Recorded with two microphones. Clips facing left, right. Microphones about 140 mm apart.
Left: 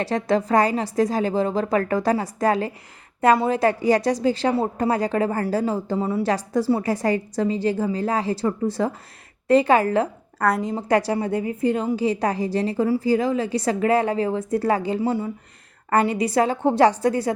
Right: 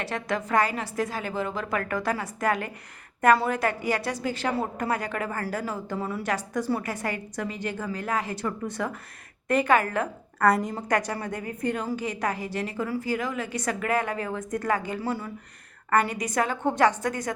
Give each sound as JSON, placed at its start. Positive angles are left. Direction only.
{"t": 0.0, "sound": "a woman's voice", "side_deg": 35}